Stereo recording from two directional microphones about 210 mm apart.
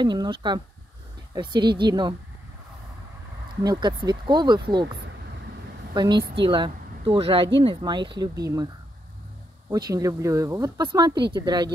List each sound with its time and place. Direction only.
0.0 s speech: 20° right (ahead or behind)
3.6 s speech: 20° right (ahead or behind)
5.9 s speech: 20° right (ahead or behind)
9.7 s speech: 15° right (ahead or behind)